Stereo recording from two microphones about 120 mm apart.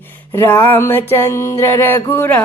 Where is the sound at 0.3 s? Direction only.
15° left (ahead or behind).